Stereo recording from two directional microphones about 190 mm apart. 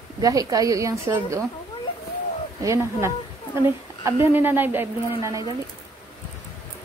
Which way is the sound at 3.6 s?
15° right (ahead or behind).